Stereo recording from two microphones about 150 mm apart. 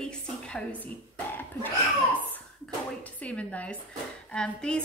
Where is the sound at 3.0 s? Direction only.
10° left (ahead or behind).